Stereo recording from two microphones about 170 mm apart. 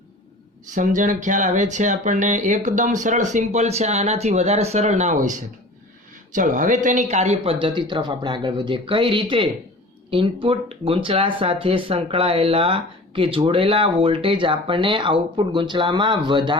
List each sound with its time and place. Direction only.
0.7 s speech: 50° right (ahead or behind); by 16.6 s 25° right (ahead or behind)